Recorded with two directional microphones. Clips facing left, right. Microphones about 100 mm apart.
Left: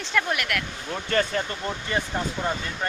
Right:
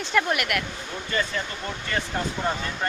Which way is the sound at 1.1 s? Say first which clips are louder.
Left 4 dB; 65° left (ahead or behind).